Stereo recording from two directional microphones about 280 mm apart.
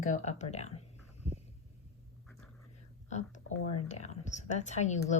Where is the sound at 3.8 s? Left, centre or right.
Left.